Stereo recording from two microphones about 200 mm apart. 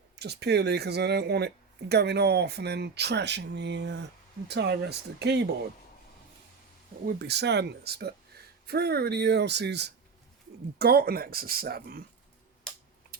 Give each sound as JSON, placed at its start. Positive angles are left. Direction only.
{"t": 0.2, "sound": "speech", "side_deg": -55}
{"t": 7.0, "sound": "speech", "side_deg": -50}